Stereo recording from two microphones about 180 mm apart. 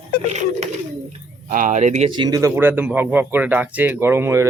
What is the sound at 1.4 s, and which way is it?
Speech, 50° right (ahead or behind).